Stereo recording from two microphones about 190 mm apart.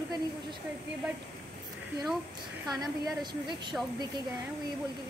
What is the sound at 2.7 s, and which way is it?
A woman's voice, 20° right (ahead or behind).